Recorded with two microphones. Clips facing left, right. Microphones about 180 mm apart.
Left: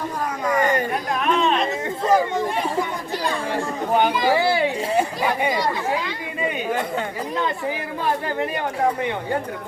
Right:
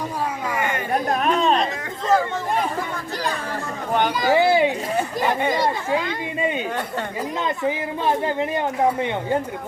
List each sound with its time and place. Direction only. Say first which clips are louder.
1.1 s chatter: even; 40° right (ahead or behind)
4.3 s a sound: right 7 dB; 20° right (ahead or behind)
4.9 s speech: left 1 dB; 10° left (ahead or behind)